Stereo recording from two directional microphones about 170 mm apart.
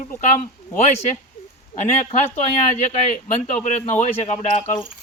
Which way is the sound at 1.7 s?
45° left (ahead or behind).